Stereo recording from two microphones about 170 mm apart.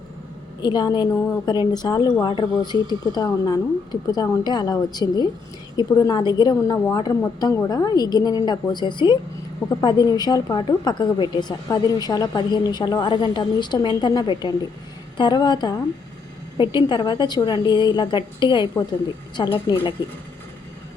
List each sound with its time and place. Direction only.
0.6 s a woman's voice: 25° left (ahead or behind)